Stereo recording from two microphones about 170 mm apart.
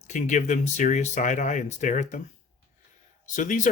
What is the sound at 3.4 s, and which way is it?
Speech, 50° left (ahead or behind).